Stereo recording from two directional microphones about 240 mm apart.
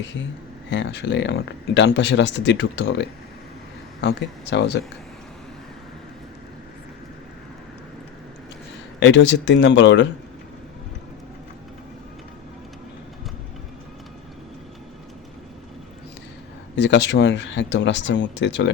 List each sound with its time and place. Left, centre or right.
0.7 s speech: left
9.0 s speech: left
16.7 s speech: left